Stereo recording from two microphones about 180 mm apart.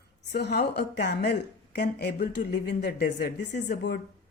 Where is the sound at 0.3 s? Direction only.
65° left (ahead or behind).